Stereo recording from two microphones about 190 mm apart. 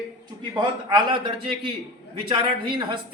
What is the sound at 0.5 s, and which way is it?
A man's voice, 25° right (ahead or behind).